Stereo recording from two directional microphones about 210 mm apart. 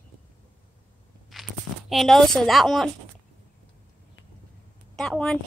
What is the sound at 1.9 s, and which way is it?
A woman's voice, centre (ahead or behind).